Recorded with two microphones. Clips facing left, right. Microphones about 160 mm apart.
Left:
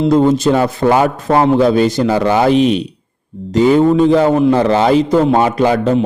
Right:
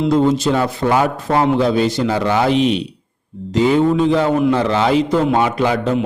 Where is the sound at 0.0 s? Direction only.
45° left (ahead or behind).